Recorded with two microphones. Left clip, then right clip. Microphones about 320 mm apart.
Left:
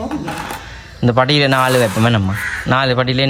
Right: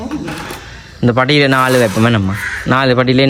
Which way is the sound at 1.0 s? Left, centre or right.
Centre.